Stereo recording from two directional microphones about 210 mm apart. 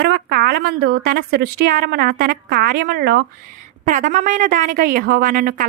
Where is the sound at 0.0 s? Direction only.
45° right (ahead or behind).